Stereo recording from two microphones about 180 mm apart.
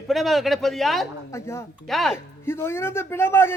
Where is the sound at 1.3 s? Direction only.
15° left (ahead or behind).